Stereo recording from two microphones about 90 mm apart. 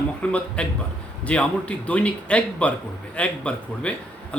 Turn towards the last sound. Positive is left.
turn(degrees=15)  # may be behind; listen again after turning